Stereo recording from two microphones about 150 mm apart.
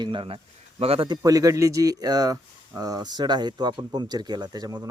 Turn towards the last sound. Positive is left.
turn(degrees=-25)  # may be behind; listen again after turning